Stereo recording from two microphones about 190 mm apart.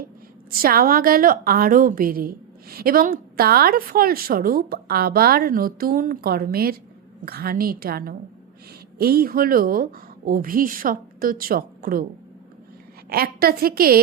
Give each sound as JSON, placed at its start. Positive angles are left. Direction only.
{"t": 0.5, "sound": "a woman's voice", "side_deg": -50}
{"t": 13.1, "sound": "a woman's voice", "side_deg": -55}